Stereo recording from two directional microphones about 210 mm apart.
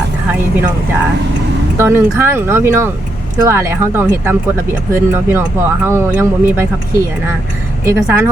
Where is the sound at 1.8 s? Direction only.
10° right (ahead or behind).